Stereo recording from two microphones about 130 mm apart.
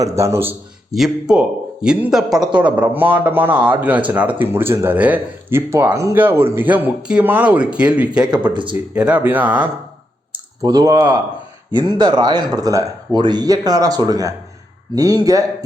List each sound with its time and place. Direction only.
0.0 s a man's voice: 25° right (ahead or behind)
0.9 s speech: centre (ahead or behind)
10.6 s a man's voice: 25° right (ahead or behind)